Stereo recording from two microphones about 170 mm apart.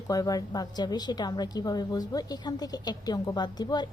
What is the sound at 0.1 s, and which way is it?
A woman's voice, 20° left (ahead or behind).